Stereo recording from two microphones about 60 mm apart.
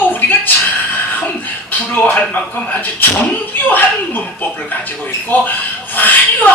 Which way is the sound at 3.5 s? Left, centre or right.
Left.